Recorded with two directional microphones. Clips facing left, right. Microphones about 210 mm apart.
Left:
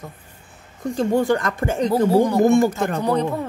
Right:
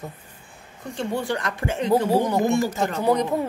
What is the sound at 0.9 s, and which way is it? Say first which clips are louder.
Speech: left 7 dB; 45° left (ahead or behind).